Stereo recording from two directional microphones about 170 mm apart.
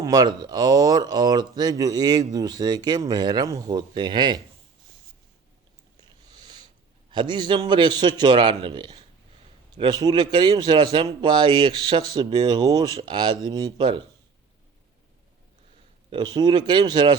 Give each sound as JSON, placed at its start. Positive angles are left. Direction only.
{"t": 0.0, "sound": "speech", "side_deg": -25}
{"t": 6.0, "sound": "a sound", "side_deg": -25}
{"t": 7.1, "sound": "speech", "side_deg": -25}
{"t": 16.0, "sound": "speech", "side_deg": -25}